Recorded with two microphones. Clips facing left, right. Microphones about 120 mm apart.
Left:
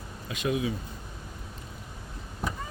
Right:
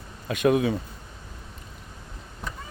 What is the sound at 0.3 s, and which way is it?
Speech, 55° right (ahead or behind).